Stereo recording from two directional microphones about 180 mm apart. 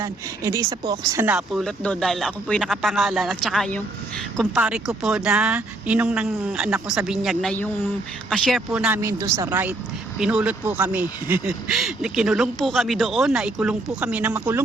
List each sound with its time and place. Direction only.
0.0 s speech: 20° right (ahead or behind)